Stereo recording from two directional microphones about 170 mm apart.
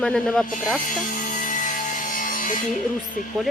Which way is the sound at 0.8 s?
50° left (ahead or behind).